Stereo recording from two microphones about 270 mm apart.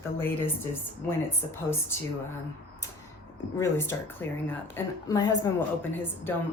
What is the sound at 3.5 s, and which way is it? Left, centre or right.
A woman's voice, centre.